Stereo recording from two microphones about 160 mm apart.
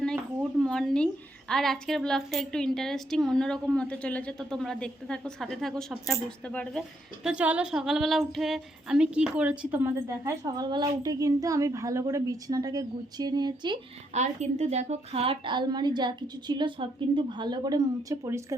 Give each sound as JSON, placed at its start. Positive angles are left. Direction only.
{"t": 0.6, "sound": "a woman's voice", "side_deg": 5}
{"t": 7.3, "sound": "speech", "side_deg": -10}
{"t": 14.1, "sound": "speech", "side_deg": -45}